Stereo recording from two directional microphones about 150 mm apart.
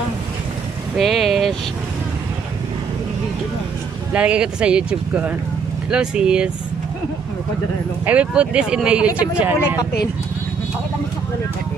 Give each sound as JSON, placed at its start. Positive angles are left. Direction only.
{"t": 0.9, "sound": "vehicle", "side_deg": 0}
{"t": 4.1, "sound": "speech", "side_deg": -10}
{"t": 8.0, "sound": "speech", "side_deg": -10}